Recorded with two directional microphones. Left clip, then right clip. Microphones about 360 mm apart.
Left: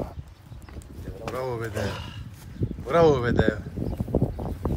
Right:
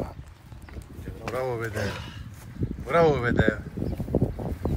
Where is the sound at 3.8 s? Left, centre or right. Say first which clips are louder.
Left 1 dB; centre.